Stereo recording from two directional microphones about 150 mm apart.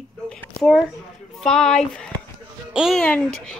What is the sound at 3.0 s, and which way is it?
Speech, 10° left (ahead or behind).